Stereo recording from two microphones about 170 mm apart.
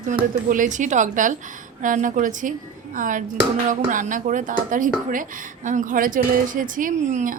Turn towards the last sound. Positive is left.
turn(degrees=-50)  # may be behind; listen again after turning